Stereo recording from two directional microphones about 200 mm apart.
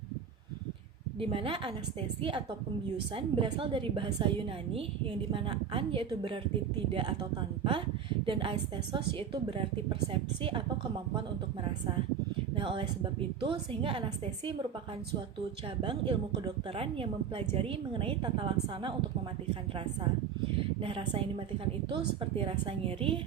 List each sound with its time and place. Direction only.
1.2 s a woman's voice: 25° right (ahead or behind)
12.5 s a woman's voice: 25° right (ahead or behind)
15.8 s a woman's voice: 25° right (ahead or behind)
20.8 s a woman's voice: 30° right (ahead or behind)